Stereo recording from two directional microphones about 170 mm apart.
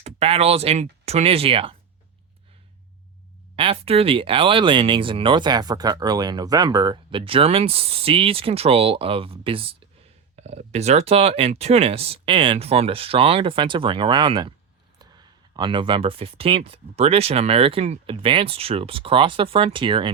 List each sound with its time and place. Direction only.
0.0 s speech: 35° right (ahead or behind)
3.5 s speech: 35° right (ahead or behind)
15.5 s speech: 30° right (ahead or behind)